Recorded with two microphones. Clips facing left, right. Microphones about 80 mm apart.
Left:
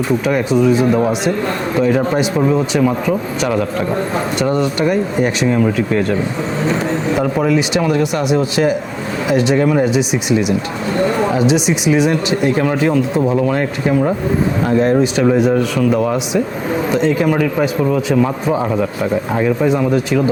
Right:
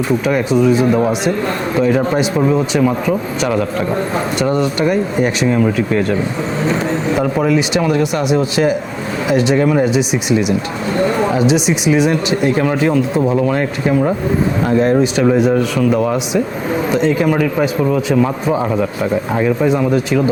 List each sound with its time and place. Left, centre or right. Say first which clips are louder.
0.3 s speech: even; centre
6.7 s vehicle: even; centre
7.4 s speech: even; centre
9.9 s speech: even; centre